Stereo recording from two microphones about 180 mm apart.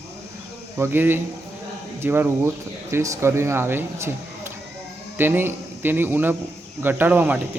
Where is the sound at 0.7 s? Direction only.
10° right (ahead or behind).